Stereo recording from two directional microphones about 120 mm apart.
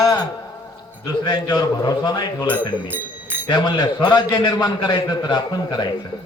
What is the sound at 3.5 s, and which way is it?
A man's voice, 35° left (ahead or behind).